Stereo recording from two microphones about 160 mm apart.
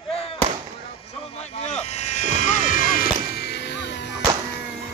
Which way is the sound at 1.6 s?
45° left (ahead or behind).